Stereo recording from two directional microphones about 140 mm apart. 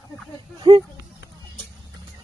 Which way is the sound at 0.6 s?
35° right (ahead or behind).